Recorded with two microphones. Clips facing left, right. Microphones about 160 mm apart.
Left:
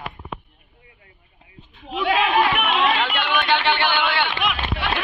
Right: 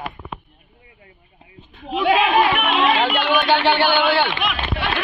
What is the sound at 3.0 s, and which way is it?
Speech, 30° right (ahead or behind).